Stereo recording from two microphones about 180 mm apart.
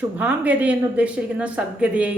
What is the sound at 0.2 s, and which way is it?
Speech, 10° right (ahead or behind).